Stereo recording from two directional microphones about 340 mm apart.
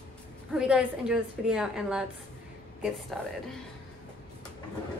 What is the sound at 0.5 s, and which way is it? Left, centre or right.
A woman's voice, centre.